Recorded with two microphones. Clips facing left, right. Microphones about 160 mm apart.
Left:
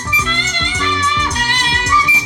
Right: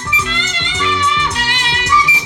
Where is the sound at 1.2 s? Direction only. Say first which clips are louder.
Even; 35° left (ahead or behind).